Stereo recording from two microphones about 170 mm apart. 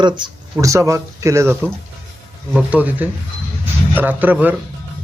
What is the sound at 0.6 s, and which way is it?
Speech, 20° right (ahead or behind).